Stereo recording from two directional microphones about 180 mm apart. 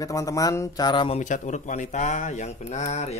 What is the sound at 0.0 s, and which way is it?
Speech, 20° left (ahead or behind).